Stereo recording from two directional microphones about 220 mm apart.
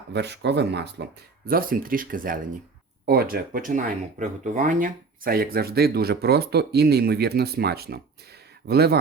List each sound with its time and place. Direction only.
0.1 s speech: 50° right (ahead or behind)